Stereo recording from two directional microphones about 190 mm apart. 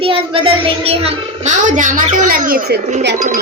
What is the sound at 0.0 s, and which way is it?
A child's voice, 30° right (ahead or behind).